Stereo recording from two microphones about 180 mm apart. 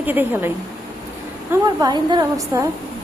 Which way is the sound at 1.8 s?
25° right (ahead or behind).